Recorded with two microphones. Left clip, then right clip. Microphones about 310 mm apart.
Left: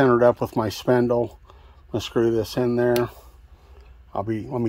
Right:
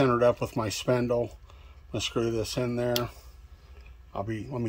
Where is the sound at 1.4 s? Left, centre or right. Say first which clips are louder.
Left 5 dB; left.